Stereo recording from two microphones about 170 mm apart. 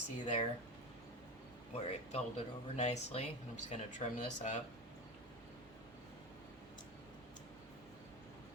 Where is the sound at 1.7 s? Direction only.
40° left (ahead or behind).